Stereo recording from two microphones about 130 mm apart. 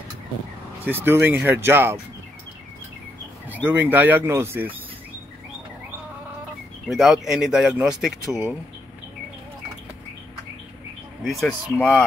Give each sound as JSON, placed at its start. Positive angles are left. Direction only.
{"t": 0.8, "sound": "speech", "side_deg": -15}
{"t": 3.6, "sound": "speech", "side_deg": -10}
{"t": 6.9, "sound": "speech", "side_deg": -5}
{"t": 11.2, "sound": "speech", "side_deg": 0}